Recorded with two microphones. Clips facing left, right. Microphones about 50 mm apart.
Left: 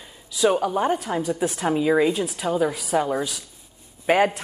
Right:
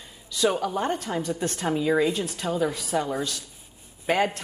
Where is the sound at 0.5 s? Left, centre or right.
Centre.